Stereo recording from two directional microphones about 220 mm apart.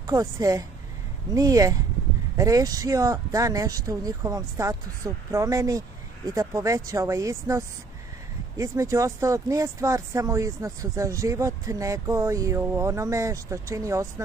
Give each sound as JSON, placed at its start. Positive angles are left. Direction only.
{"t": 0.0, "sound": "speech", "side_deg": -15}